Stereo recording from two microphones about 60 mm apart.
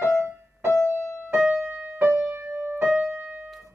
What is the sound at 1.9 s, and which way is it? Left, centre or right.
Music, right.